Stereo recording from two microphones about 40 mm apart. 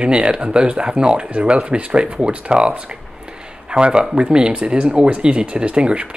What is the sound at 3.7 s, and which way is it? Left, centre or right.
Speech, right.